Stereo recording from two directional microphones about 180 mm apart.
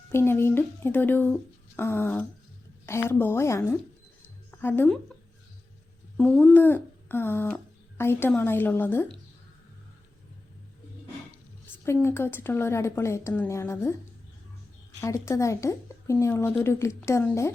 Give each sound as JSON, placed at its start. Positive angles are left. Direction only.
{"t": 0.1, "sound": "a woman's voice", "side_deg": 15}
{"t": 6.1, "sound": "speech", "side_deg": 5}
{"t": 11.9, "sound": "speech", "side_deg": 15}
{"t": 15.0, "sound": "speech", "side_deg": 15}